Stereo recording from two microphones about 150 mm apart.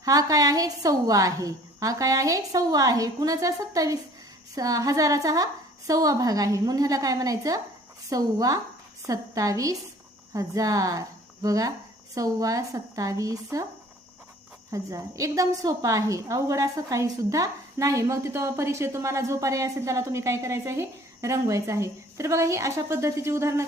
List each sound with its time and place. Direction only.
0.0 s a woman's voice: 25° right (ahead or behind)
14.7 s a woman's voice: 20° right (ahead or behind)